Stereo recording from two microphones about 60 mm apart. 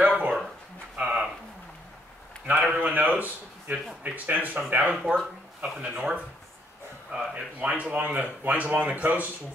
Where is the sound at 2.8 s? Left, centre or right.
Right.